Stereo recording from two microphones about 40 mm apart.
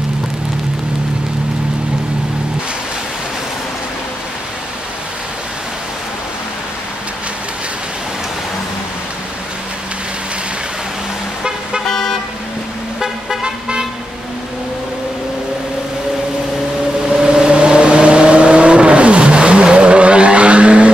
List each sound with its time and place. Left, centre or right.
11.9 s car: centre
13.0 s vehicle: centre
17.0 s vehicle: centre